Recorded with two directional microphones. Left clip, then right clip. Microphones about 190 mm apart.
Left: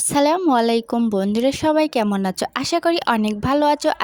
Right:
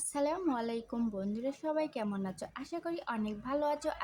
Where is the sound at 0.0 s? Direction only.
55° left (ahead or behind).